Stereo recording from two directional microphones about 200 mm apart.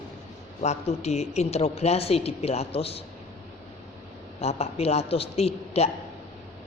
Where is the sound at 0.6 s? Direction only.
35° left (ahead or behind).